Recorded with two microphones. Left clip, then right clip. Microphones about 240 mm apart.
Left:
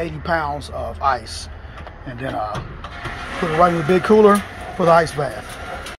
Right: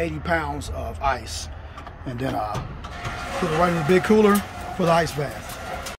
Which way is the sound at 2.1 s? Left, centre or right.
Right.